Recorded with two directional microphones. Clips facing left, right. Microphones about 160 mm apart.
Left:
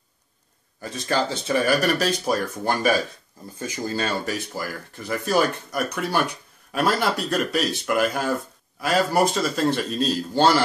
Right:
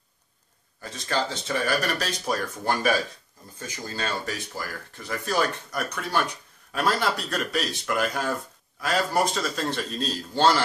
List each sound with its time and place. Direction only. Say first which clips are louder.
0.8 s speech: left 4 dB; 10° left (ahead or behind)